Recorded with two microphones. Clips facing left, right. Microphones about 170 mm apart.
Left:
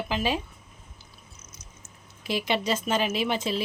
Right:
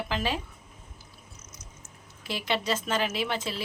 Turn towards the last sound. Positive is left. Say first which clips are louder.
# left 4 dB
turn(degrees=20)  # may be behind; listen again after turning